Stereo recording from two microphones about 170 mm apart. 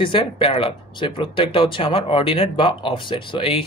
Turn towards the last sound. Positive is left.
turn(degrees=30)  # may be behind; listen again after turning